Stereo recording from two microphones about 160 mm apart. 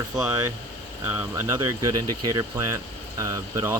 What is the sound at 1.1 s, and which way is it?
Speech, 15° right (ahead or behind).